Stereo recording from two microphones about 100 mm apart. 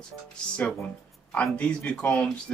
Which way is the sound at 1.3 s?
10° left (ahead or behind).